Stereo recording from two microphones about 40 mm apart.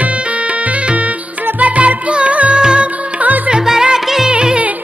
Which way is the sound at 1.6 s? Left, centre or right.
Right.